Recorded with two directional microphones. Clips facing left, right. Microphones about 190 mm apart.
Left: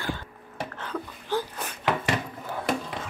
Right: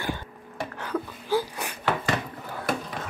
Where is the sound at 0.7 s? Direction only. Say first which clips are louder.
Right 4 dB; 10° right (ahead or behind).